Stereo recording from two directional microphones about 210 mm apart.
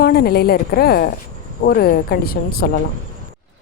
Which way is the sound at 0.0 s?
45° left (ahead or behind).